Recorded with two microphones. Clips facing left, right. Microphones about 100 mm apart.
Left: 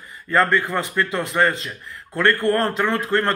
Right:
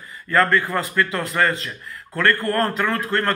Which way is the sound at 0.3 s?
20° left (ahead or behind).